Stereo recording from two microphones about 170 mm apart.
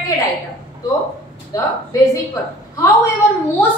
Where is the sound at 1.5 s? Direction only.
20° left (ahead or behind).